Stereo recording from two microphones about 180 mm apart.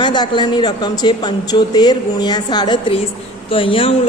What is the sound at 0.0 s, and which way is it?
A woman's voice, 25° left (ahead or behind).